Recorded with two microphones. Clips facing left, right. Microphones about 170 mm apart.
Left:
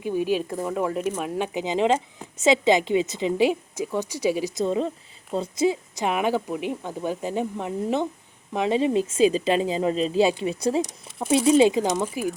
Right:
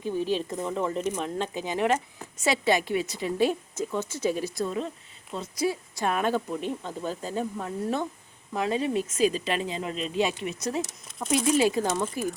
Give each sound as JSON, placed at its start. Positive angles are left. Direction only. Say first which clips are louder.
{"t": 0.0, "sound": "speech", "louder": "left 3 dB", "side_deg": 10}
{"t": 5.6, "sound": "speech", "louder": "left 3 dB", "side_deg": 20}
{"t": 10.8, "sound": "speech", "louder": "left 6 dB", "side_deg": 15}
{"t": 11.3, "sound": "speech", "louder": "left 6 dB", "side_deg": 30}
{"t": 11.7, "sound": "speech", "louder": "left 3 dB", "side_deg": 15}